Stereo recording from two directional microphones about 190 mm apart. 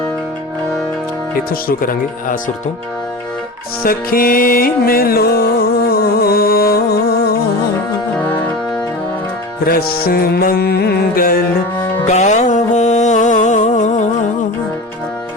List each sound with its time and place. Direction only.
1.5 s music: 50° left (ahead or behind)
3.8 s music: 50° left (ahead or behind)
9.6 s music: 50° left (ahead or behind)
12.0 s music: 35° left (ahead or behind)